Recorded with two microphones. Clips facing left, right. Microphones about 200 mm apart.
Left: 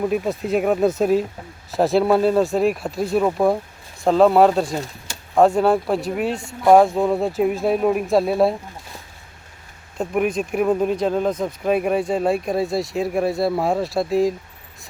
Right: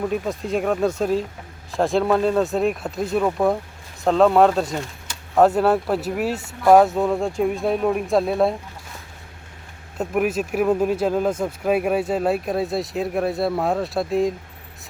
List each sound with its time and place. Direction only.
0.1 s speech: 5° left (ahead or behind)
4.7 s speech: 35° left (ahead or behind)
5.3 s speech: 5° right (ahead or behind)
10.0 s speech: 5° right (ahead or behind)